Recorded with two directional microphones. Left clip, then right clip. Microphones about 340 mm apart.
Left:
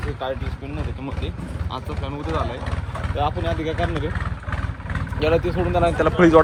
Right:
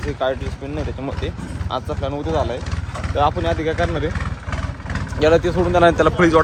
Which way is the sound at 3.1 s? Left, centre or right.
Right.